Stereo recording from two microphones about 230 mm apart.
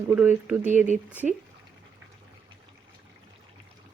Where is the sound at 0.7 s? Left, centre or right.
Right.